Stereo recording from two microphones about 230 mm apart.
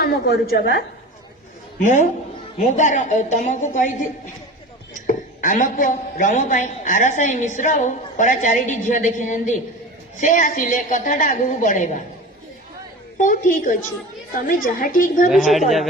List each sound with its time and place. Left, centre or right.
0.0 s a woman's voice: left
1.8 s a woman's voice: left
4.9 s a woman's voice: left
13.1 s a woman's voice: left
15.3 s a woman's voice: centre